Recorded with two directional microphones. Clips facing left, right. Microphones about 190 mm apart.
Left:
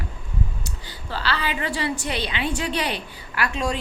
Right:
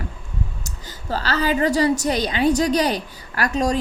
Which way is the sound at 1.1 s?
40° right (ahead or behind).